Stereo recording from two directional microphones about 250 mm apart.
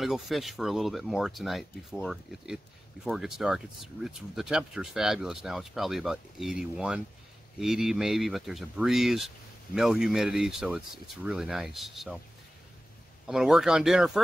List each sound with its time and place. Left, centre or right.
0.0 s speech: centre
13.3 s speech: centre